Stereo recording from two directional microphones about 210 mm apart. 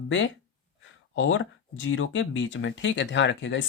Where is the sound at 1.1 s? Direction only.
65° left (ahead or behind).